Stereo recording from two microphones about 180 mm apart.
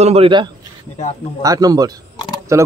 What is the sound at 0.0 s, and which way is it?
A man's voice, 35° right (ahead or behind).